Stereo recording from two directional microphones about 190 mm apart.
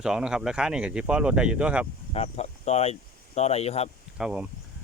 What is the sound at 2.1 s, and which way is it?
Speech, 35° left (ahead or behind).